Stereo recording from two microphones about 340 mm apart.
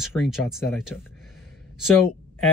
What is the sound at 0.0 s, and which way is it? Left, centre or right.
Speech, centre.